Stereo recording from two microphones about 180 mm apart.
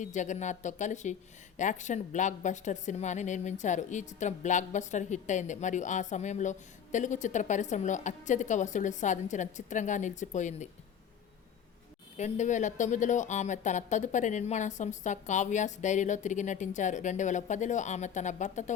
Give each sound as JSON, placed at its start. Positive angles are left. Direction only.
{"t": 0.0, "sound": "a woman's voice", "side_deg": 40}
{"t": 12.1, "sound": "a woman's voice", "side_deg": 40}